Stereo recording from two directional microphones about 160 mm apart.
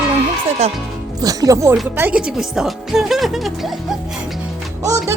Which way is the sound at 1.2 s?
20° right (ahead or behind).